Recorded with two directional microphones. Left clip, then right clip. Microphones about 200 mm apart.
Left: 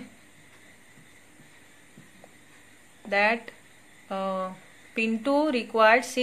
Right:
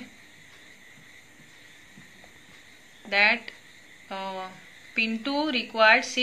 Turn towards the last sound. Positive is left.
turn(degrees=55)  # may be behind; listen again after turning